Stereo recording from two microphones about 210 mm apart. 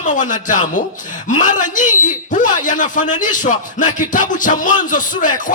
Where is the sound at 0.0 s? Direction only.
35° left (ahead or behind).